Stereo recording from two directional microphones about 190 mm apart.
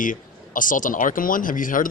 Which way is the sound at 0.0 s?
45° left (ahead or behind).